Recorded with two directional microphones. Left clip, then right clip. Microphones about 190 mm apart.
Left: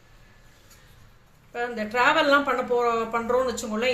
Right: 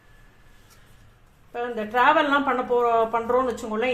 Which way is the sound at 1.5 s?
30° right (ahead or behind).